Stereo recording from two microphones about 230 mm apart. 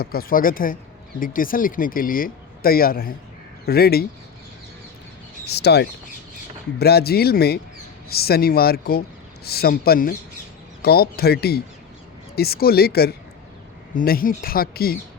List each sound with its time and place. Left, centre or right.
0.0 s a man's voice: left
5.5 s a man's voice: left